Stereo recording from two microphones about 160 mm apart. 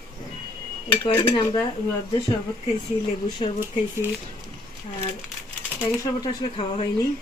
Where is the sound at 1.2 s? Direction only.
25° left (ahead or behind).